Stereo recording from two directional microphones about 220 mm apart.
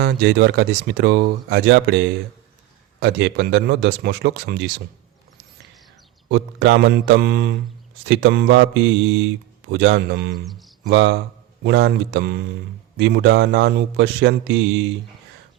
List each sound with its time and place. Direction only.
0.0 s speech: 45° right (ahead or behind)
6.3 s speech: 55° right (ahead or behind)
10.3 s speech: centre (ahead or behind)
10.8 s speech: 55° right (ahead or behind)